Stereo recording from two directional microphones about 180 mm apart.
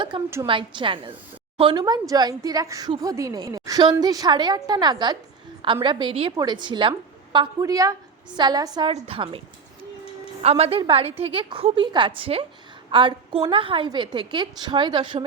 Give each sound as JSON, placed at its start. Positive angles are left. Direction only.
{"t": 0.4, "sound": "a woman's voice", "side_deg": -30}
{"t": 8.9, "sound": "a woman's voice", "side_deg": -30}
{"t": 10.4, "sound": "a woman's voice", "side_deg": -35}